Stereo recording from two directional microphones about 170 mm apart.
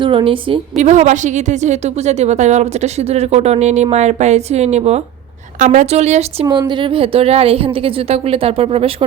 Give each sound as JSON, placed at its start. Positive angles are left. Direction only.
{"t": 0.0, "sound": "a woman's voice", "side_deg": -30}
{"t": 6.5, "sound": "a woman's voice", "side_deg": -25}